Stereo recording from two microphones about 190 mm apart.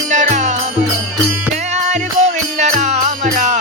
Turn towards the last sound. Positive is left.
turn(degrees=-35)  # may be behind; listen again after turning